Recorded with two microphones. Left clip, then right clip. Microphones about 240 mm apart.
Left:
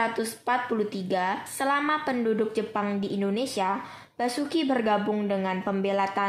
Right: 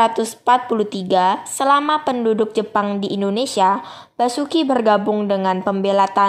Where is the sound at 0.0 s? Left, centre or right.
Right.